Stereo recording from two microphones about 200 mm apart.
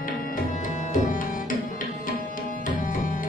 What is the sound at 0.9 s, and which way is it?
Music, 40° left (ahead or behind).